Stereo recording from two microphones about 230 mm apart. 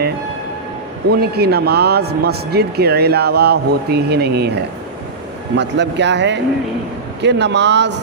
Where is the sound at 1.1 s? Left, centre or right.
Right.